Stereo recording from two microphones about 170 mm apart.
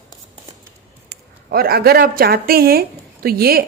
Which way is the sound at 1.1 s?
65° right (ahead or behind).